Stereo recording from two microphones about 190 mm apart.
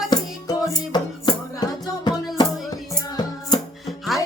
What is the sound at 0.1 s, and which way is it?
Music, 20° left (ahead or behind).